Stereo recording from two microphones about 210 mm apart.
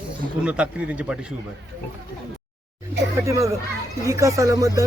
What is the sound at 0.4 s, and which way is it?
Speech, 5° right (ahead or behind).